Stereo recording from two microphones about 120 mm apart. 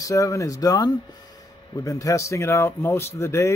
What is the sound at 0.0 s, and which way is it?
Speech, 25° left (ahead or behind).